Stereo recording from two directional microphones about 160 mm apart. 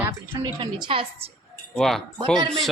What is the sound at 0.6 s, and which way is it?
Speech, 35° right (ahead or behind).